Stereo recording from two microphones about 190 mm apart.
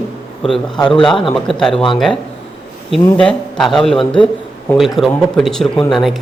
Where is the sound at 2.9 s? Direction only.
Centre (ahead or behind).